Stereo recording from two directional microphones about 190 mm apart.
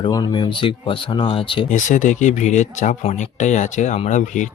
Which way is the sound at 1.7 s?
40° left (ahead or behind).